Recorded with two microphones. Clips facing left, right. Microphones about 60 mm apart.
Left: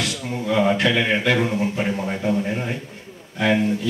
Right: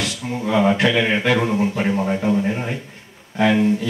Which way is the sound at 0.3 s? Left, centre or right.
Right.